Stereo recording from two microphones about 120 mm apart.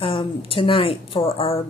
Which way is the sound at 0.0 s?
50° left (ahead or behind).